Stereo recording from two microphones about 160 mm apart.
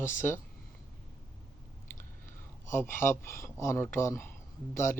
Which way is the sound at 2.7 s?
15° left (ahead or behind).